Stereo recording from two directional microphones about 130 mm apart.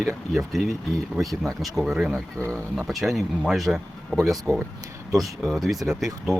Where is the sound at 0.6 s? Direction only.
Centre (ahead or behind).